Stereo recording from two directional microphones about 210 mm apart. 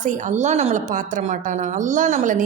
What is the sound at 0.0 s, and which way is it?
A woman's voice, 35° right (ahead or behind).